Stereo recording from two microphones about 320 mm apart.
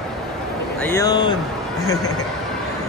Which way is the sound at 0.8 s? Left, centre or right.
Centre.